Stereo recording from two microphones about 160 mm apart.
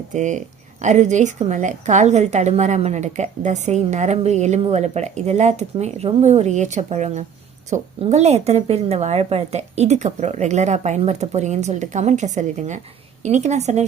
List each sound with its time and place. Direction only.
0.1 s a woman's voice: 50° right (ahead or behind)